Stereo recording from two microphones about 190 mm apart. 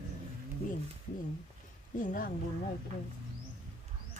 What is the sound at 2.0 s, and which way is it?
Speech, 45° left (ahead or behind).